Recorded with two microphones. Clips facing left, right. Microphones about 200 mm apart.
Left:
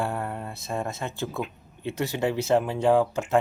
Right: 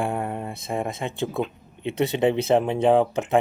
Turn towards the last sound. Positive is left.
turn(degrees=-20)  # may be behind; listen again after turning